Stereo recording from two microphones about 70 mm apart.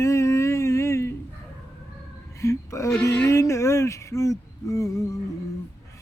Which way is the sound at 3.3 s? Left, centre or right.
Left.